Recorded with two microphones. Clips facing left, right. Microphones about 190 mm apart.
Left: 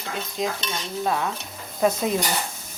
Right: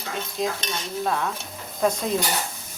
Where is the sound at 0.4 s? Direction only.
Centre (ahead or behind).